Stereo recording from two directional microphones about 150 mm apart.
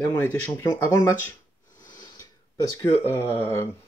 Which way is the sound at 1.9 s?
25° left (ahead or behind).